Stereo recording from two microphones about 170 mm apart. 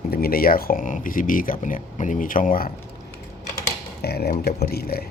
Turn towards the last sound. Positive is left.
turn(degrees=65)  # may be behind; listen again after turning